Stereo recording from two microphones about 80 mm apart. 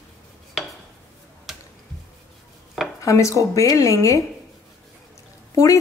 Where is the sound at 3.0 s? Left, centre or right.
Left.